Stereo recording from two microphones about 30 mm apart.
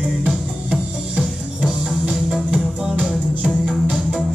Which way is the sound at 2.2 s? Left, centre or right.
Right.